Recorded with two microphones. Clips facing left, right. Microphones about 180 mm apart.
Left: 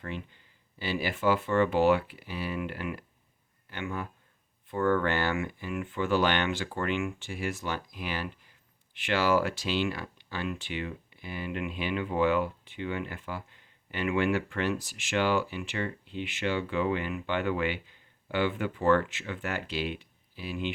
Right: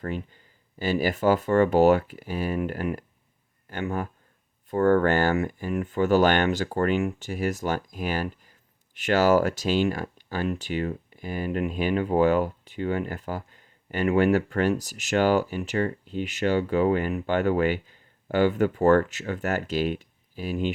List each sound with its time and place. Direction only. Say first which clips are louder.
0.8 s speech: right 7 dB; 45° right (ahead or behind)